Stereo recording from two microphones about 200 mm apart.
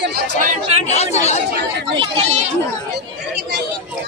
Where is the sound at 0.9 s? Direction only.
35° left (ahead or behind).